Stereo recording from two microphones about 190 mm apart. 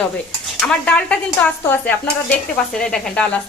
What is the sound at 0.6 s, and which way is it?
A woman's voice, 5° left (ahead or behind).